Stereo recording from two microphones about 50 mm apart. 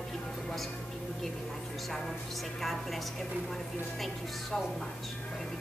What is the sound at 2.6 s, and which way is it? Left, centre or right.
Speech, centre.